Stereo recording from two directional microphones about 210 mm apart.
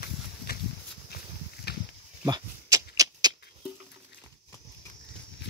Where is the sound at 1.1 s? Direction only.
50° left (ahead or behind).